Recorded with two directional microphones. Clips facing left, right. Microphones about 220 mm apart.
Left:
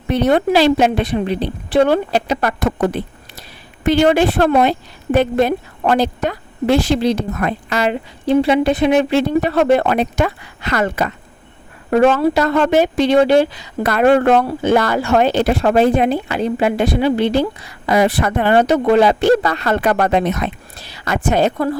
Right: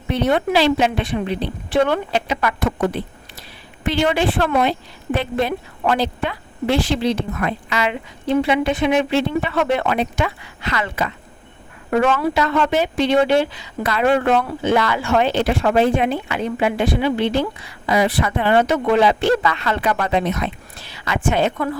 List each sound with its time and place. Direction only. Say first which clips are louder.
0.1 s a woman's voice: left 4 dB; 40° left (ahead or behind)